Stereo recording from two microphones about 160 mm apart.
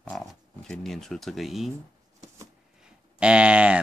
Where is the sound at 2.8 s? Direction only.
5° right (ahead or behind).